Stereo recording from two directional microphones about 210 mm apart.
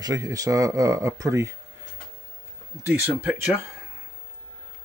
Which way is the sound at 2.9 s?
10° right (ahead or behind).